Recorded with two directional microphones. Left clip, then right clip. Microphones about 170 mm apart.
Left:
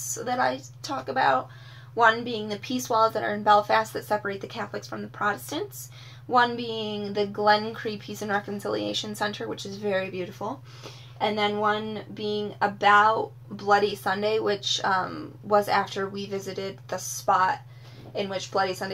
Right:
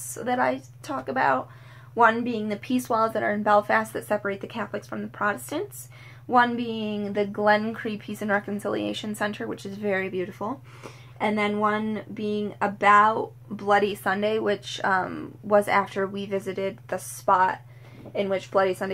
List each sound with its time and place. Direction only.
0.1 s a woman's voice: 20° right (ahead or behind)
2.4 s speech: 20° right (ahead or behind)